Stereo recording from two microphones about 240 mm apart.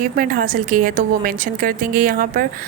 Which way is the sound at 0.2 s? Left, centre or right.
Right.